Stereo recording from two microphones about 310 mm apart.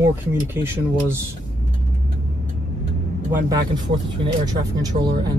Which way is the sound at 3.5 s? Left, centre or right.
Centre.